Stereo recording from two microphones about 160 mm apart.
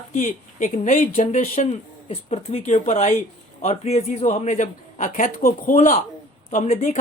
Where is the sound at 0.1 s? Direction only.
50° left (ahead or behind).